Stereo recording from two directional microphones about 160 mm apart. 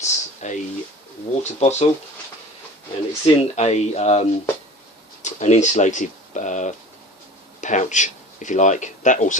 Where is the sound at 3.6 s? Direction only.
45° left (ahead or behind).